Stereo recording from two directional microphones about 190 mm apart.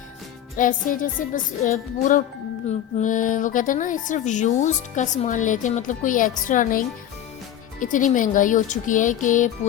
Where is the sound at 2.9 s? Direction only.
45° left (ahead or behind).